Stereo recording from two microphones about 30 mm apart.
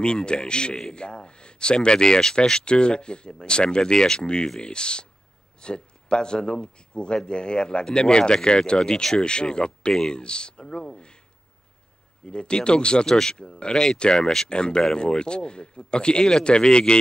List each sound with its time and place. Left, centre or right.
0.0 s speech: left
12.3 s speech: left